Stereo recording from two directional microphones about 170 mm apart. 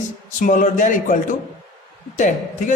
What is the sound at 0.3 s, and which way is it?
Speech, 50° left (ahead or behind).